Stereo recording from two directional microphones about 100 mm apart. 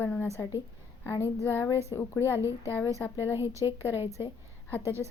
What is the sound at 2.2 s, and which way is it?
Speech, 25° right (ahead or behind).